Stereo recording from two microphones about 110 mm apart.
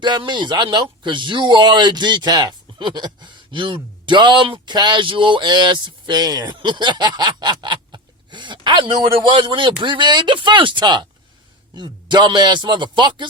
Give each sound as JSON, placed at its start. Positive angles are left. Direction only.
{"t": 0.0, "sound": "speech", "side_deg": -45}